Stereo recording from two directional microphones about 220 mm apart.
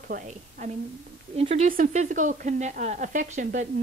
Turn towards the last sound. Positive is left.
turn(degrees=-35)  # may be behind; listen again after turning